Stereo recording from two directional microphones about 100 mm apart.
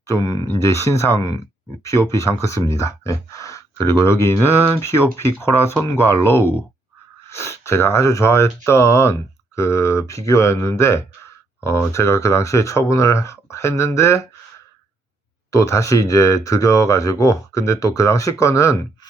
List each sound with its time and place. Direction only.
0.0 s speech: 35° left (ahead or behind)
15.4 s speech: 30° left (ahead or behind)